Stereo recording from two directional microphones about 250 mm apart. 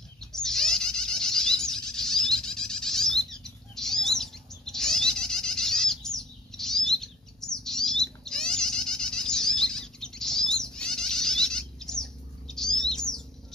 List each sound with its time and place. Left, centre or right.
0.2 s bird: centre